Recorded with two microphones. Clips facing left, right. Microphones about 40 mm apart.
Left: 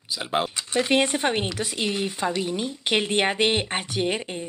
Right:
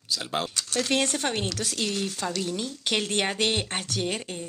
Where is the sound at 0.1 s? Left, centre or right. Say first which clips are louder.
Left 3 dB; centre.